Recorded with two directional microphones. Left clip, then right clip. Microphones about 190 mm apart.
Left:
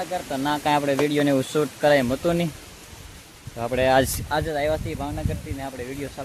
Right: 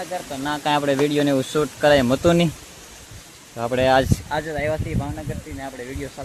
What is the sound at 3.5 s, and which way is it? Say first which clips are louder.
Speech: right 2 dB; 15° right (ahead or behind).